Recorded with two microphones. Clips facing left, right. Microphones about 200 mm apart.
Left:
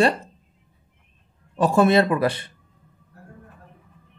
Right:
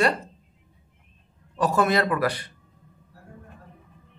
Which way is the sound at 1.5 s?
25° left (ahead or behind).